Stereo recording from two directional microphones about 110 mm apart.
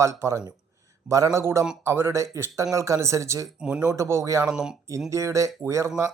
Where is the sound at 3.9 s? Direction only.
25° right (ahead or behind).